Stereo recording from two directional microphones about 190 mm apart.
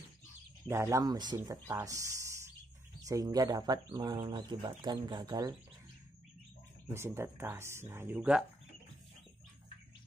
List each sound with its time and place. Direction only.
0.7 s speech: 15° right (ahead or behind)
6.9 s speech: 15° right (ahead or behind)